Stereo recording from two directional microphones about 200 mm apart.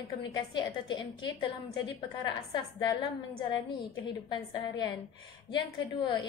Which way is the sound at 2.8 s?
20° left (ahead or behind).